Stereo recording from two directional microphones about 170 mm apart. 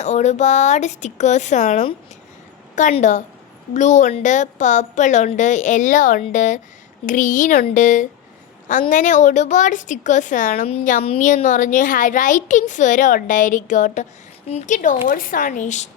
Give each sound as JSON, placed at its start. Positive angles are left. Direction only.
{"t": 0.0, "sound": "a child's voice", "side_deg": 40}
{"t": 10.7, "sound": "a child's voice", "side_deg": 35}